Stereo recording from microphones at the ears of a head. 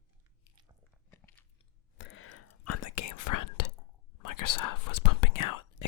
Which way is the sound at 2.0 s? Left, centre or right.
Left.